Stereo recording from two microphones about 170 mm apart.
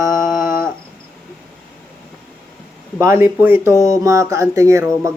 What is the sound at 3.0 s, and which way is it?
Speech, 15° right (ahead or behind).